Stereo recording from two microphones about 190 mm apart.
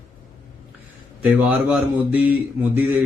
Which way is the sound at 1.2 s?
5° right (ahead or behind).